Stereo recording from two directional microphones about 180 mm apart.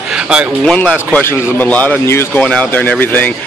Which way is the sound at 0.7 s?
5° left (ahead or behind).